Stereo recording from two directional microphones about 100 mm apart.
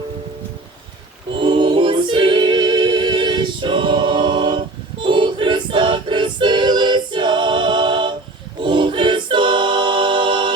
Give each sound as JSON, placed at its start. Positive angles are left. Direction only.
{"t": 1.4, "sound": "a capella", "side_deg": -55}
{"t": 5.0, "sound": "choir", "side_deg": -55}
{"t": 8.6, "sound": "a capella", "side_deg": -55}